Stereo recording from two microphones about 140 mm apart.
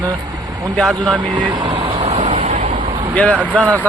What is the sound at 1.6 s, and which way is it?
Vehicle, 40° right (ahead or behind).